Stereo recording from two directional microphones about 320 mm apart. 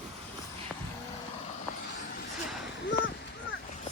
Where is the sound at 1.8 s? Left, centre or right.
Left.